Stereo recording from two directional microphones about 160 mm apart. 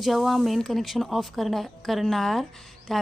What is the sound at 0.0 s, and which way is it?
Speech, centre (ahead or behind).